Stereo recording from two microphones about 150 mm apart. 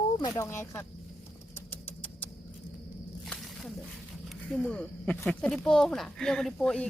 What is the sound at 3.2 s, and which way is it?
Snake, centre (ahead or behind).